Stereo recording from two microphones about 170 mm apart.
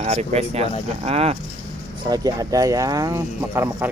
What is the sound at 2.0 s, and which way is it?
Speech, 25° right (ahead or behind).